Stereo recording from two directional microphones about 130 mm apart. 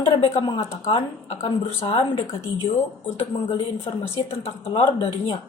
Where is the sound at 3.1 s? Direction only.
50° left (ahead or behind).